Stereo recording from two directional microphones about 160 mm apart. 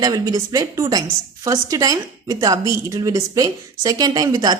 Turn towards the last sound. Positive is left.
turn(degrees=-25)  # may be behind; listen again after turning